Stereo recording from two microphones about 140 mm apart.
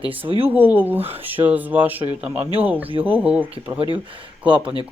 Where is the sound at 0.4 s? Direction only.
15° right (ahead or behind).